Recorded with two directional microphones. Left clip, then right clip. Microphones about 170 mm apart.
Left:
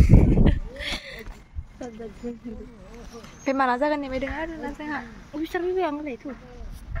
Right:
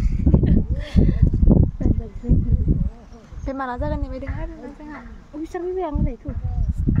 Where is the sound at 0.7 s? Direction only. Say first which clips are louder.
Right 5 dB; 35° right (ahead or behind).